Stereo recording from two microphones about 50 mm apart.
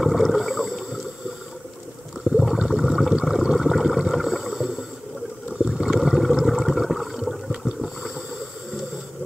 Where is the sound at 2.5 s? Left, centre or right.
Centre.